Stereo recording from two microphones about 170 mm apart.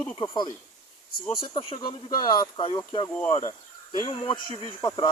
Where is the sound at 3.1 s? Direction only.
10° left (ahead or behind).